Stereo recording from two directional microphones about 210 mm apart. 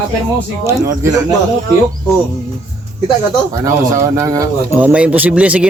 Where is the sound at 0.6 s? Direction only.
15° right (ahead or behind).